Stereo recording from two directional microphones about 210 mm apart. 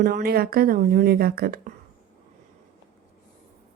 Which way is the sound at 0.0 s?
45° right (ahead or behind).